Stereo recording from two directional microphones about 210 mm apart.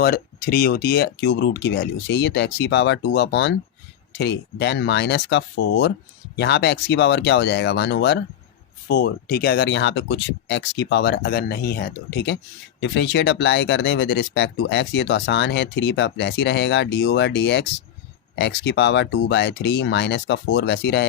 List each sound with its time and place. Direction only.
0.0 s speech: 45° left (ahead or behind)